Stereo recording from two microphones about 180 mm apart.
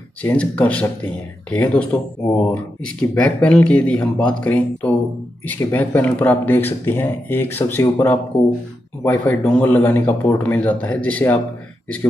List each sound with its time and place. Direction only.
0.2 s speech: 10° left (ahead or behind)